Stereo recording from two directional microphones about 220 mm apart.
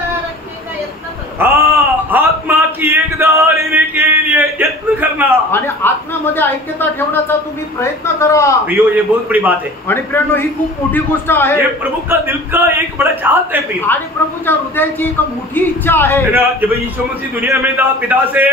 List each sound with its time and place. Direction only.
1.4 s a sound: 15° right (ahead or behind)
5.5 s a woman's voice: 10° left (ahead or behind)
8.6 s a man's voice: 5° right (ahead or behind)
9.8 s a woman's voice: 10° left (ahead or behind)
11.8 s a man's voice: 10° right (ahead or behind)
13.9 s a woman's voice: 10° left (ahead or behind); by 18.5 s 10° right (ahead or behind)